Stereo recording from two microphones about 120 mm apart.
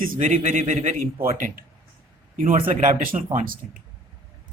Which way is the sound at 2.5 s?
90° right.